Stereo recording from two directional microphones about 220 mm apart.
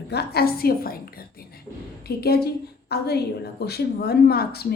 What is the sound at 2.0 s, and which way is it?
A woman's voice, 45° left (ahead or behind).